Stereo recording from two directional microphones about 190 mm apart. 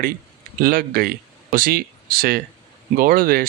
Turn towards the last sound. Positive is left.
turn(degrees=-50)  # may be behind; listen again after turning